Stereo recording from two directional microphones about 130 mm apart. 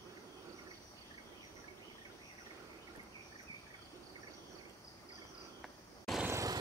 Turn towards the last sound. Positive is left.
turn(degrees=-25)  # may be behind; listen again after turning